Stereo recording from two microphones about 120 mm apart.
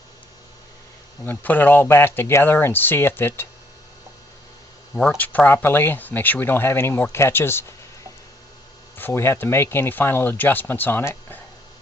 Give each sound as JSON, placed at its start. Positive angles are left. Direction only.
{"t": 1.2, "sound": "speech", "side_deg": 15}
{"t": 4.9, "sound": "speech", "side_deg": 10}
{"t": 9.0, "sound": "speech", "side_deg": 20}